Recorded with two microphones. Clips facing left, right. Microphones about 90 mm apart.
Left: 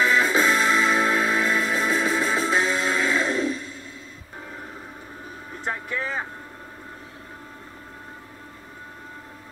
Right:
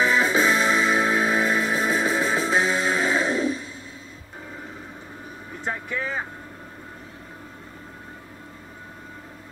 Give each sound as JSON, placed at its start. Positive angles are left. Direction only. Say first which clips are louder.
{"t": 0.0, "sound": "music", "louder": "even", "side_deg": -30}
{"t": 0.3, "sound": "music", "louder": "even", "side_deg": -10}
{"t": 5.7, "sound": "vehicle", "louder": "even", "side_deg": -15}